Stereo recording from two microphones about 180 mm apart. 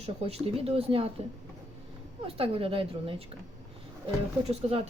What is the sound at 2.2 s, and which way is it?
Speech, 30° right (ahead or behind).